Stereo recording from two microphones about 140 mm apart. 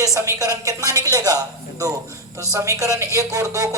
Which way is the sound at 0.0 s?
20° right (ahead or behind).